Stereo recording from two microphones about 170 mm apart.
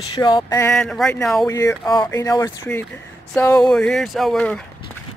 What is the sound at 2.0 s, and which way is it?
Speech, 20° left (ahead or behind).